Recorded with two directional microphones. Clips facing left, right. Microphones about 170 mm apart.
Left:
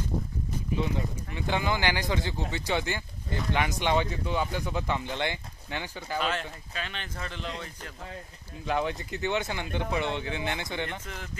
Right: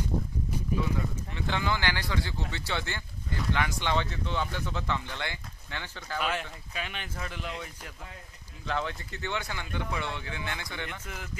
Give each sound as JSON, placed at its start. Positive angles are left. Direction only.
{"t": 0.7, "sound": "speech", "side_deg": 20}
{"t": 6.7, "sound": "speech", "side_deg": -10}
{"t": 8.6, "sound": "speech", "side_deg": 15}